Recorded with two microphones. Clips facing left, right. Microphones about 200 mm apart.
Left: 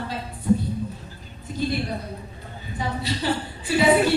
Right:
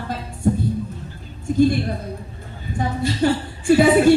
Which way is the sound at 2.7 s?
50° right (ahead or behind).